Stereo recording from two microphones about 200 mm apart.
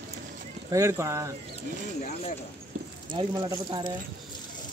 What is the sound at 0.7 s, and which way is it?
Speech, 15° right (ahead or behind).